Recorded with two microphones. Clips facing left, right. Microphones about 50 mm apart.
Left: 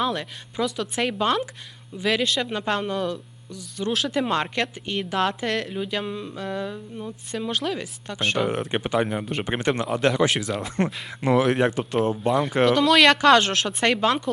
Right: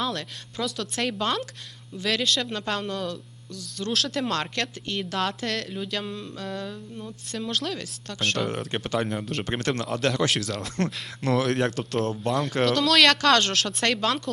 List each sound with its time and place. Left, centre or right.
0.0 s speech: centre